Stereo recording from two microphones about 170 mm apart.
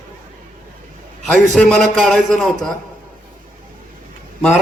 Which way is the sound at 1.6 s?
5° left (ahead or behind).